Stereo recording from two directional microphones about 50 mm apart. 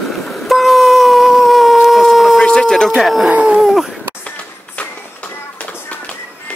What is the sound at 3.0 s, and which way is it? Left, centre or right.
Speech, centre.